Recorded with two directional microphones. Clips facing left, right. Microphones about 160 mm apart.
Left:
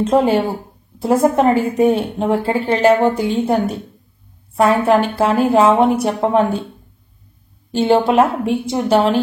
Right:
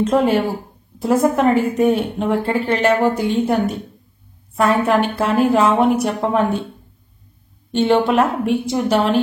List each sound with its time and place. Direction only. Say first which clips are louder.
0.3 s a woman's voice: left 1 dB; 30° left (ahead or behind)
7.7 s a woman's voice: left 2 dB; 30° left (ahead or behind)